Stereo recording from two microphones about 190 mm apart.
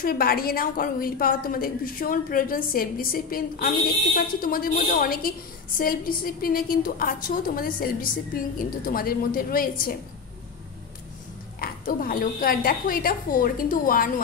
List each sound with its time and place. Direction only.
0.0 s a woman's voice: 50° left (ahead or behind)
11.6 s a woman's voice: 50° left (ahead or behind)